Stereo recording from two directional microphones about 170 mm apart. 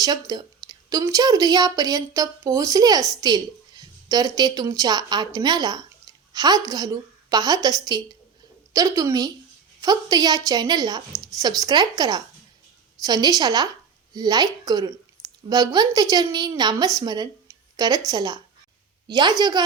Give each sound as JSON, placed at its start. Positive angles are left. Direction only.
{"t": 0.0, "sound": "a woman's voice", "side_deg": -20}